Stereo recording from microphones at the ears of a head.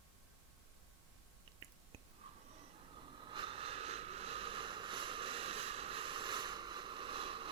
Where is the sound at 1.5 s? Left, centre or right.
Right.